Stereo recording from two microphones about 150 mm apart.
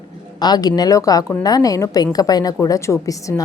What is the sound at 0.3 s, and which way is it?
A woman's voice, 25° left (ahead or behind).